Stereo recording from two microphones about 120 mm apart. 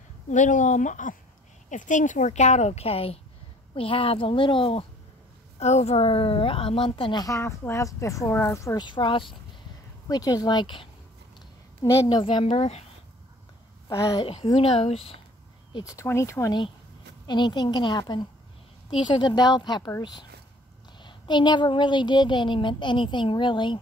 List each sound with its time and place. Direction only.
0.3 s a woman's voice: 90° left; by 4.8 s 50° left (ahead or behind)
5.6 s a woman's voice: 65° left (ahead or behind); by 7.2 s 45° left (ahead or behind)
7.2 s a woman's voice: 20° left (ahead or behind)
8.7 s a woman's voice: 40° left (ahead or behind)
10.0 s a woman's voice: 30° left (ahead or behind)
11.8 s a woman's voice: 30° left (ahead or behind)
12.4 s speech: 60° left (ahead or behind)
13.8 s a woman's voice: 25° left (ahead or behind)
14.2 s a woman's voice: 50° left (ahead or behind)
15.8 s a woman's voice: 25° left (ahead or behind)
17.3 s a woman's voice: 35° left (ahead or behind)